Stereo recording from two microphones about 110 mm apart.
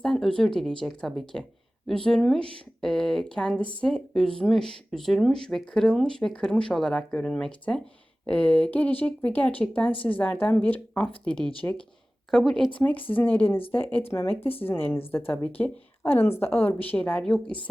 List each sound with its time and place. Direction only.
0.0 s speech: 5° left (ahead or behind)